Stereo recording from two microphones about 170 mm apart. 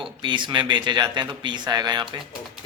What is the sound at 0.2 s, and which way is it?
Speech, 30° right (ahead or behind).